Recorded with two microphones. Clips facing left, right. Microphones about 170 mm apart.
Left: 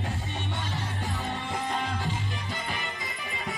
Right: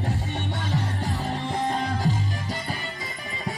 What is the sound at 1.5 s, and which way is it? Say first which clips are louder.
Music: right 5 dB; 35° right (ahead or behind).